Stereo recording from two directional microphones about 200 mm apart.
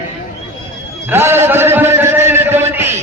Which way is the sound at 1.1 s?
10° right (ahead or behind).